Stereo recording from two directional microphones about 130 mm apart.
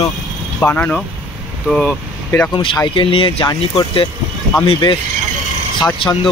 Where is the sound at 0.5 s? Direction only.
10° left (ahead or behind).